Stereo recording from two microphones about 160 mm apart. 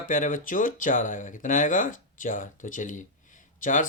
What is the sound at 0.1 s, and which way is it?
Speech, 55° left (ahead or behind).